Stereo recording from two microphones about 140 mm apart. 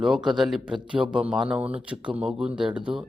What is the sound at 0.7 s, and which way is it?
Speech, 35° right (ahead or behind).